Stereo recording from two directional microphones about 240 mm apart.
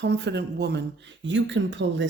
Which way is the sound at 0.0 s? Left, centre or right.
Right.